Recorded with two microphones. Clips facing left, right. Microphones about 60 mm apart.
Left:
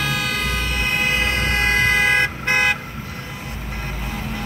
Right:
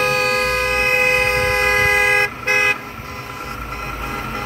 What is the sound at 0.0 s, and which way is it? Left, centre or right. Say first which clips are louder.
Vehicle: right 6 dB; right.